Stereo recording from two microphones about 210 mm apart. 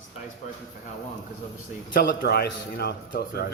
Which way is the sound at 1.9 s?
45° left (ahead or behind).